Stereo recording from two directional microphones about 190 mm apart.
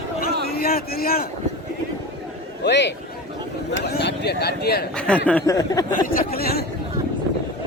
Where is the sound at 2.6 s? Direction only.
65° left (ahead or behind).